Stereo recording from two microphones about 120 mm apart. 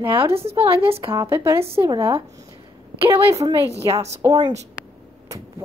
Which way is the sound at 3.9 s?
65° right (ahead or behind).